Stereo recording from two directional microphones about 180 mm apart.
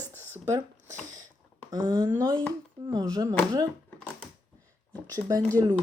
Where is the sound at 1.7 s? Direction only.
20° right (ahead or behind).